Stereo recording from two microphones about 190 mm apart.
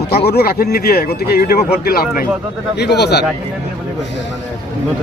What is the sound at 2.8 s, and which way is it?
Speech, 60° left (ahead or behind).